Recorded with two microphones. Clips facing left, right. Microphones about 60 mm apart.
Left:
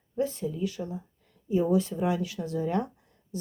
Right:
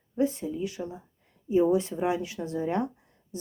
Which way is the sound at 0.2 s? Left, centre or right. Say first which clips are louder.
Right 2 dB; right.